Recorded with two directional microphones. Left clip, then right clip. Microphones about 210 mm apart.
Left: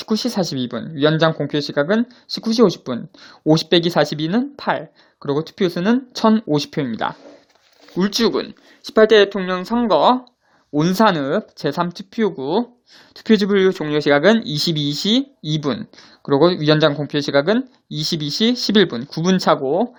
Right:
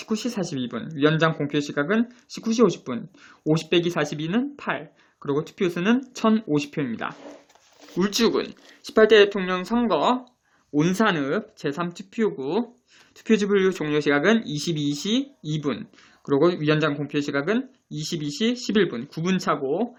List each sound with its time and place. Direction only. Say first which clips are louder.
0.0 s speech: left 7 dB; 35° left (ahead or behind)